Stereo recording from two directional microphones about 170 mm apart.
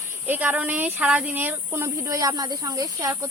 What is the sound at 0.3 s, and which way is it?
Speech, 10° right (ahead or behind).